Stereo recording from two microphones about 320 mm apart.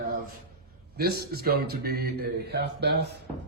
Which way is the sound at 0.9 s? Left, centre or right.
Right.